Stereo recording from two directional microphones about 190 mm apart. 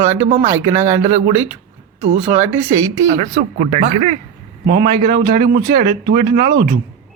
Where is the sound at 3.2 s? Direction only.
35° right (ahead or behind).